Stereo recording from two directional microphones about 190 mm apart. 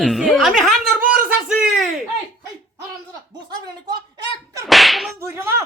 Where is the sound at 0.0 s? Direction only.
Centre (ahead or behind).